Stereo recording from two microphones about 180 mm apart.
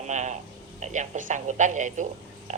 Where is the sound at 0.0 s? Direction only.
40° right (ahead or behind).